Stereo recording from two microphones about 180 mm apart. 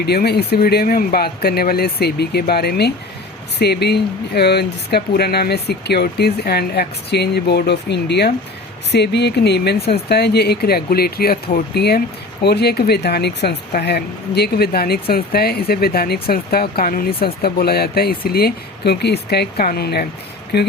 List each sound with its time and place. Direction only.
0.0 s speech: 60° left (ahead or behind)